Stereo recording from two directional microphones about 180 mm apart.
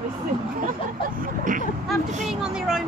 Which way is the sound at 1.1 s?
50° right (ahead or behind).